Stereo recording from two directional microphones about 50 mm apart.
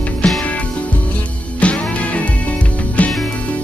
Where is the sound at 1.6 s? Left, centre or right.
Left.